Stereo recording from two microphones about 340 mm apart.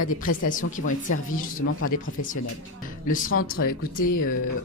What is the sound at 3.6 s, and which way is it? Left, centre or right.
Speech, left.